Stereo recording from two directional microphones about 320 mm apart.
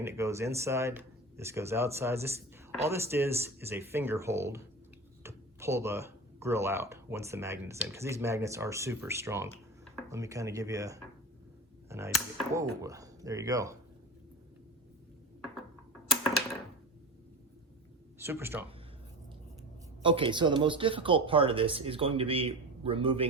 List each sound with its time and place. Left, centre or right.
0.0 s speech: centre
18.2 s speech: centre
20.0 s speech: centre